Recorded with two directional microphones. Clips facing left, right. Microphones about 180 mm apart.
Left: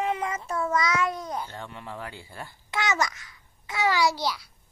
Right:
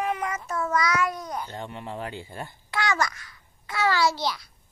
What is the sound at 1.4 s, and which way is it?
Speech, 20° right (ahead or behind).